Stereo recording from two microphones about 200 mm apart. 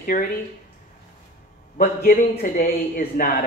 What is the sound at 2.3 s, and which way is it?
A woman's voice, 35° left (ahead or behind).